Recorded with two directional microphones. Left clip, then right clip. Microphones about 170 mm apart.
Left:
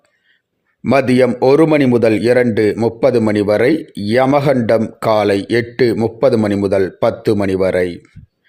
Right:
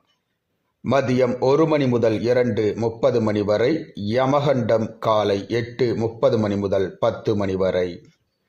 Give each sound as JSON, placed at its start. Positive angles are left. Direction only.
{"t": 0.9, "sound": "a man's voice", "side_deg": 40}